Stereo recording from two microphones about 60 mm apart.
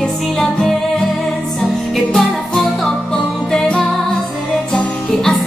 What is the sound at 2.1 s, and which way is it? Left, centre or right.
Music, centre.